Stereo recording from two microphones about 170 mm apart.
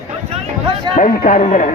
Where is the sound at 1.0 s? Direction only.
50° left (ahead or behind).